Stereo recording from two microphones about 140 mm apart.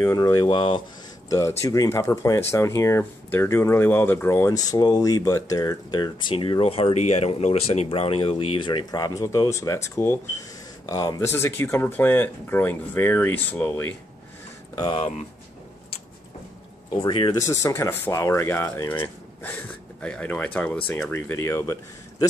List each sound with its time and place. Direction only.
0.0 s speech: 25° left (ahead or behind)
1.6 s speech: 20° left (ahead or behind)
14.8 s speech: 40° left (ahead or behind)
16.9 s speech: 35° left (ahead or behind)
17.4 s speech: 20° left (ahead or behind)